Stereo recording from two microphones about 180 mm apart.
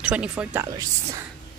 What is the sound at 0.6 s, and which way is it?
Speech, 20° right (ahead or behind).